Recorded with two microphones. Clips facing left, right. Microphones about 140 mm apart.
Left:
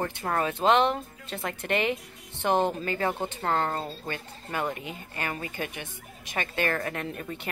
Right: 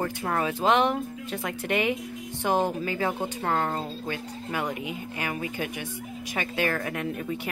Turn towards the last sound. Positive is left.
turn(degrees=-10)  # may be behind; listen again after turning